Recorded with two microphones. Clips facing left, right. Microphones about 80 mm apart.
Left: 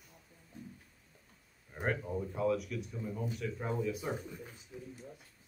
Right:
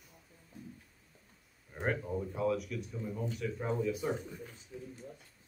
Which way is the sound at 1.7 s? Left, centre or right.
Centre.